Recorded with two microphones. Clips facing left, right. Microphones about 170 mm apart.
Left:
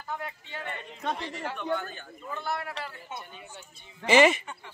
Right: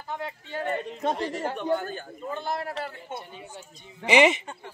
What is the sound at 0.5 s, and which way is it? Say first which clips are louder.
A man's voice: right 9 dB; 40° right (ahead or behind).